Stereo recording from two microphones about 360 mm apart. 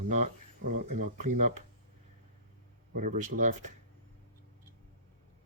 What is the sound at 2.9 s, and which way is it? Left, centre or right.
Speech, right.